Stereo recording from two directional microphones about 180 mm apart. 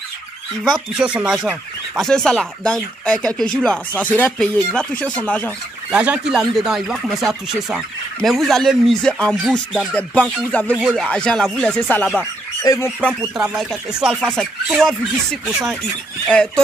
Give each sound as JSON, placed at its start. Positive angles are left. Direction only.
{"t": 0.7, "sound": "speech", "side_deg": 0}
{"t": 5.9, "sound": "speech", "side_deg": -5}
{"t": 13.2, "sound": "speech", "side_deg": -5}